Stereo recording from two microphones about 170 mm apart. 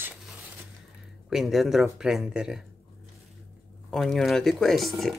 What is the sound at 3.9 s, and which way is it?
Speech, centre (ahead or behind).